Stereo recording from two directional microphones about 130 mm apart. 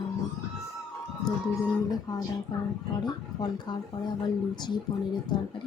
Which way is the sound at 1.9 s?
30° left (ahead or behind).